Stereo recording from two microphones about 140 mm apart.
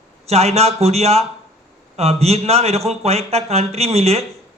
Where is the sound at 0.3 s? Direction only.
50° right (ahead or behind).